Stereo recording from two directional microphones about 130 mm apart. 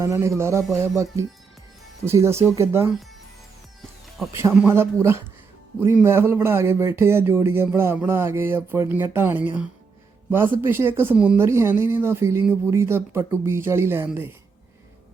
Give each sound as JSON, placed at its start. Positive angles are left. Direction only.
{"t": 0.0, "sound": "speech", "side_deg": -20}
{"t": 4.5, "sound": "a man's voice", "side_deg": -15}